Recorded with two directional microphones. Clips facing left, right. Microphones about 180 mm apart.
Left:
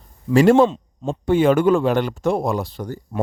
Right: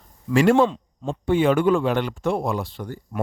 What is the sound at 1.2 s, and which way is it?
A man's voice, 40° left (ahead or behind).